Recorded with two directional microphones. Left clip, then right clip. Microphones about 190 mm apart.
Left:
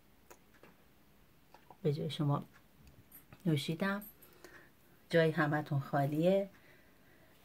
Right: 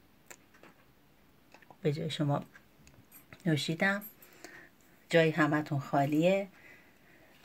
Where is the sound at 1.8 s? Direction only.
Centre (ahead or behind).